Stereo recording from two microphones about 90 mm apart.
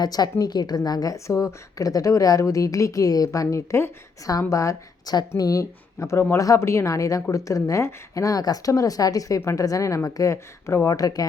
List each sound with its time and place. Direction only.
0.0 s a woman's voice: 45° left (ahead or behind)